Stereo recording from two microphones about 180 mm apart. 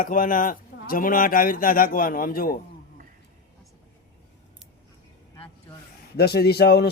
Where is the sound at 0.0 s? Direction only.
50° left (ahead or behind).